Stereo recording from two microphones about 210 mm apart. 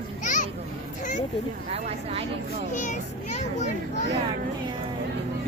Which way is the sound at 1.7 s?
30° right (ahead or behind).